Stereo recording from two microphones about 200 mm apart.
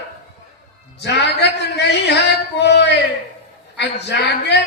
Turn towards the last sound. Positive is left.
turn(degrees=60)  # may be behind; listen again after turning